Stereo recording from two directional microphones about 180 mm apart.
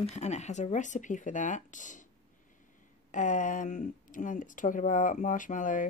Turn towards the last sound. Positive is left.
turn(degrees=45)  # may be behind; listen again after turning